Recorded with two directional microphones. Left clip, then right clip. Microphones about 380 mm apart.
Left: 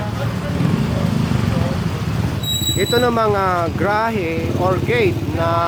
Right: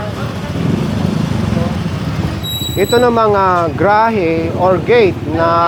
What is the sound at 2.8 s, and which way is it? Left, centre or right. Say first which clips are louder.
Speech: right 7 dB; centre.